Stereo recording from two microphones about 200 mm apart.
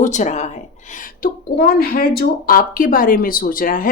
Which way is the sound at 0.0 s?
35° left (ahead or behind).